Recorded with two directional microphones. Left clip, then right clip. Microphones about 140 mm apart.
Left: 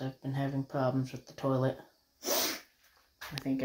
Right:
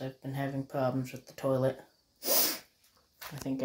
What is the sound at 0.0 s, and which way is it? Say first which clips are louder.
Speech: even; 20° right (ahead or behind).